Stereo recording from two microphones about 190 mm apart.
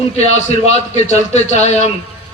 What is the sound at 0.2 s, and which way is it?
A man's voice, 35° left (ahead or behind).